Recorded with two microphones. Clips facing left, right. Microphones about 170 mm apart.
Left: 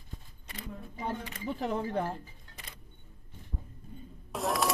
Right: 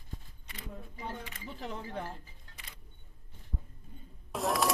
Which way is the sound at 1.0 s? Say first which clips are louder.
Left 6 dB; 55° left (ahead or behind).